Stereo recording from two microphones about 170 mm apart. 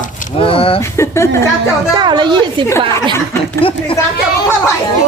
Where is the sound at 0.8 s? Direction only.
15° left (ahead or behind).